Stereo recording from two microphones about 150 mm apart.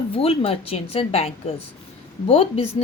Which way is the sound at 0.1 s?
40° left (ahead or behind).